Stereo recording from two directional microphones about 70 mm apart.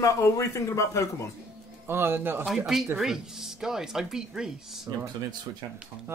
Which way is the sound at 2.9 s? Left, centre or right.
Centre.